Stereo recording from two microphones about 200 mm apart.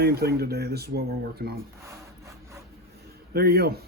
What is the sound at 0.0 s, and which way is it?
Speech, 50° right (ahead or behind).